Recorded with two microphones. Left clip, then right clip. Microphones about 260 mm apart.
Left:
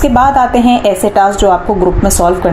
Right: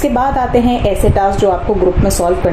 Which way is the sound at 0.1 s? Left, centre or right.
Left.